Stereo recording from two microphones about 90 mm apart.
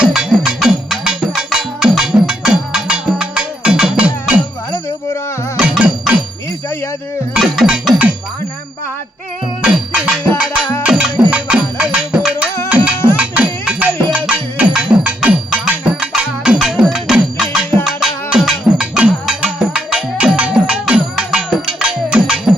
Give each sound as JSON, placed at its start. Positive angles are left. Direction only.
{"t": 0.0, "sound": "music", "side_deg": -5}
{"t": 5.5, "sound": "music", "side_deg": -10}
{"t": 7.3, "sound": "music", "side_deg": 0}
{"t": 9.6, "sound": "music", "side_deg": -10}